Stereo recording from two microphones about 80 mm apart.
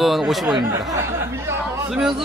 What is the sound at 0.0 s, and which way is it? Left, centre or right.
Speech, centre.